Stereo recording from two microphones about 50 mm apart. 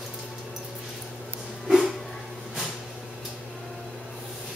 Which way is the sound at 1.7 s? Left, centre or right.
Centre.